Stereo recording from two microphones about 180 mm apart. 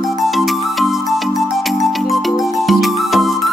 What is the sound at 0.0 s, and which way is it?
Music, centre (ahead or behind).